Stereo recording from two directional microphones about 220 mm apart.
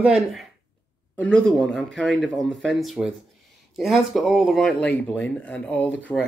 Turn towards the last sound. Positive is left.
turn(degrees=5)  # may be behind; listen again after turning